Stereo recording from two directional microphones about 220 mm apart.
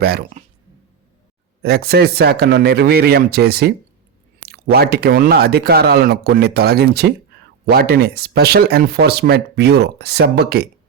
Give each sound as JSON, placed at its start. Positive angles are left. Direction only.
{"t": 0.0, "sound": "speech", "side_deg": -45}
{"t": 1.6, "sound": "speech", "side_deg": -45}